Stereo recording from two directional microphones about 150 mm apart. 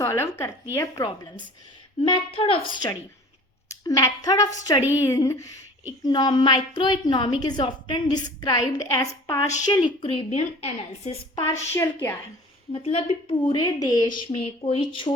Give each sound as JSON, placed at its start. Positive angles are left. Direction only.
{"t": 0.0, "sound": "a woman's voice", "side_deg": 20}
{"t": 2.0, "sound": "a woman's voice", "side_deg": 35}
{"t": 9.5, "sound": "a woman's voice", "side_deg": 50}
{"t": 11.3, "sound": "a woman's voice", "side_deg": 20}
{"t": 12.7, "sound": "a woman's voice", "side_deg": 40}